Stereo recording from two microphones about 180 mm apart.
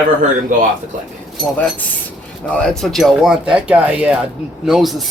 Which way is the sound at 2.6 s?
Centre (ahead or behind).